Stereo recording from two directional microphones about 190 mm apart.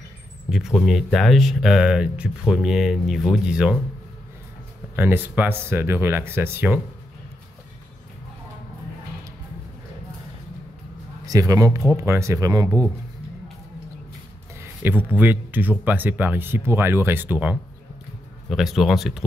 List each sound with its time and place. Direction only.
0.5 s speech: centre (ahead or behind)
4.9 s speech: 10° right (ahead or behind)
11.2 s speech: 15° right (ahead or behind)
14.6 s speech: 10° right (ahead or behind)